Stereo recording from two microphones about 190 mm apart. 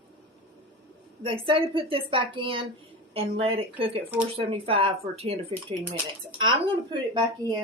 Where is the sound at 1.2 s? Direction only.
25° right (ahead or behind).